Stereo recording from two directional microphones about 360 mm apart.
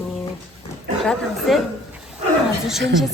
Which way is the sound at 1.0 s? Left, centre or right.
Centre.